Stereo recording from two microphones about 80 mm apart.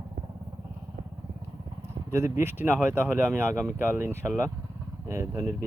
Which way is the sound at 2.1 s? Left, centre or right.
Right.